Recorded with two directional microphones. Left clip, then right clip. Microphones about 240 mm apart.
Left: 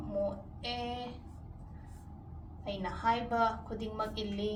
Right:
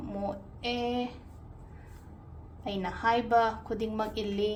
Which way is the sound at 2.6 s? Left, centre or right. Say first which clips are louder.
Right 3 dB; right.